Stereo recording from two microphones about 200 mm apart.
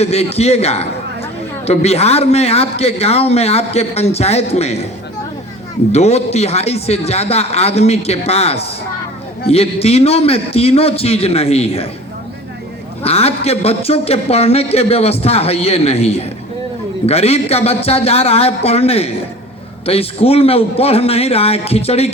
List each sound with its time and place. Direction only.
0.0 s a man's voice: 30° left (ahead or behind)
5.9 s a man's voice: 30° left (ahead or behind)
13.0 s a man's voice: 30° left (ahead or behind)